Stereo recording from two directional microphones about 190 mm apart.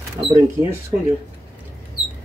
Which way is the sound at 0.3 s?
15° right (ahead or behind).